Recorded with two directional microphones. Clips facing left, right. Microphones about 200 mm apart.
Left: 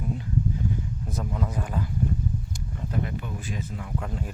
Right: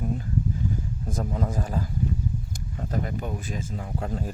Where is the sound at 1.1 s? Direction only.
40° right (ahead or behind).